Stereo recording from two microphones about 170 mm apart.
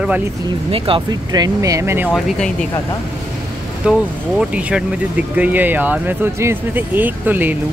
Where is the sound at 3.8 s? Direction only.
5° right (ahead or behind).